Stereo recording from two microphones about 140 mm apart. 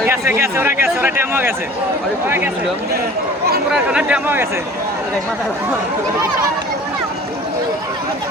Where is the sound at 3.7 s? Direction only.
5° right (ahead or behind).